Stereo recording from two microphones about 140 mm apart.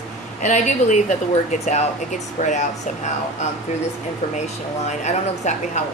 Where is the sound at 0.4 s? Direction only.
60° left (ahead or behind).